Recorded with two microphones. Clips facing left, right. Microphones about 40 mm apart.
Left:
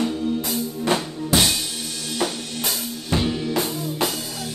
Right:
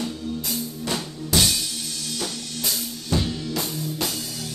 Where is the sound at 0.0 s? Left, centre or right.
Left.